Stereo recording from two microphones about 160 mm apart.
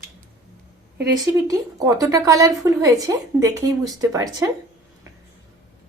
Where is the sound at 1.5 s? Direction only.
20° right (ahead or behind).